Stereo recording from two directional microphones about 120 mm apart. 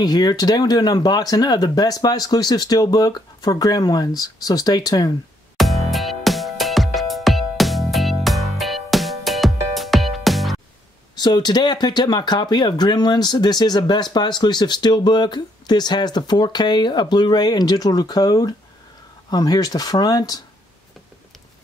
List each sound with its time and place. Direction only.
0.0 s speech: 35° left (ahead or behind)
5.6 s music: centre (ahead or behind)
11.1 s speech: 35° left (ahead or behind)